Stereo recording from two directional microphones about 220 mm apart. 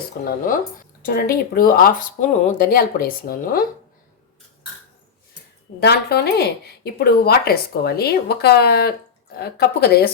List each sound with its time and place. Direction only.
0.3 s speech: 40° left (ahead or behind)
5.8 s speech: 45° left (ahead or behind)